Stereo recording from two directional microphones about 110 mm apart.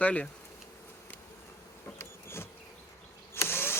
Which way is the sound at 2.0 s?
20° left (ahead or behind).